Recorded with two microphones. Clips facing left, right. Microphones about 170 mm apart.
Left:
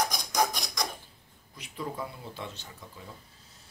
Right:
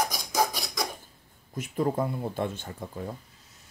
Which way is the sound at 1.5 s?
50° right (ahead or behind).